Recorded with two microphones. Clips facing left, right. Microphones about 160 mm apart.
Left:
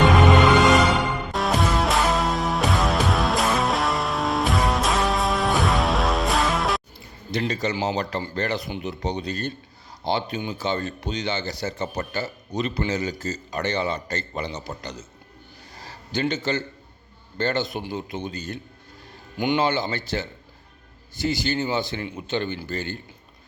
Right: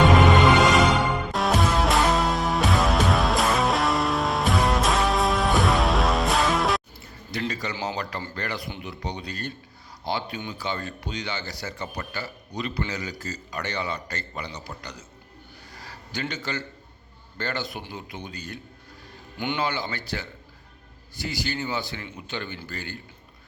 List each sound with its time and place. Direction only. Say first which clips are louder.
1.3 s music: left 2 dB; centre (ahead or behind)
7.3 s a man's voice: left 5 dB; 20° left (ahead or behind)
15.7 s a sound: left 6 dB; 25° left (ahead or behind)
17.3 s a man's voice: left 6 dB; 25° left (ahead or behind)
21.2 s a man's voice: left 6 dB; 25° left (ahead or behind)